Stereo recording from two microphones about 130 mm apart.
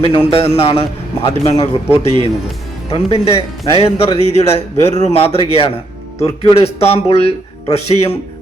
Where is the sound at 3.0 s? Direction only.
50° left (ahead or behind).